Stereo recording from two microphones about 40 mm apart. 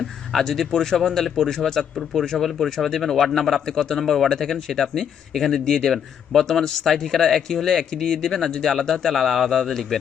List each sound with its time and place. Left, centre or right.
0.0 s speech: centre